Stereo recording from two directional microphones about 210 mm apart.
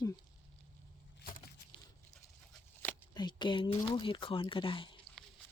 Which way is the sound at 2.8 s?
10° left (ahead or behind).